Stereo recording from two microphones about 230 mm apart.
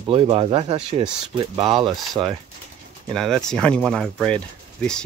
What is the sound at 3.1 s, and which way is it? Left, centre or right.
Speech, centre.